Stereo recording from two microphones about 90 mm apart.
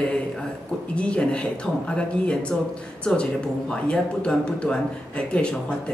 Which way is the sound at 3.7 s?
10° left (ahead or behind).